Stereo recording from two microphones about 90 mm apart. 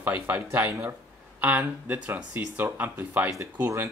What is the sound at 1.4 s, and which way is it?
Speech, 15° right (ahead or behind).